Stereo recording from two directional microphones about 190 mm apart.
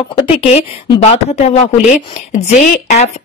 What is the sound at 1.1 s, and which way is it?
Speech, 35° left (ahead or behind).